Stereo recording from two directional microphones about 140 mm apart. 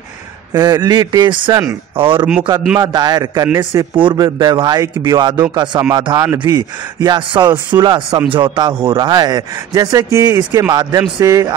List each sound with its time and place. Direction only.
0.5 s a man's voice: 30° right (ahead or behind)